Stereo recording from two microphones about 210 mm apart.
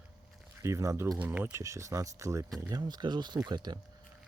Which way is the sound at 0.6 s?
15° right (ahead or behind).